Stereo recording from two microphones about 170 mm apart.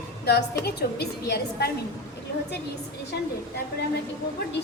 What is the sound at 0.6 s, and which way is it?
A woman's voice, 70° left (ahead or behind).